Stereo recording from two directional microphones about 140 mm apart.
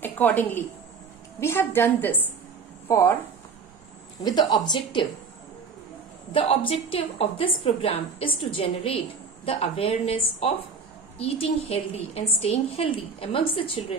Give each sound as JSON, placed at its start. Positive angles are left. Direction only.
{"t": 0.0, "sound": "a woman's voice", "side_deg": 15}
{"t": 4.2, "sound": "a woman's voice", "side_deg": 30}
{"t": 6.3, "sound": "a woman's voice", "side_deg": 40}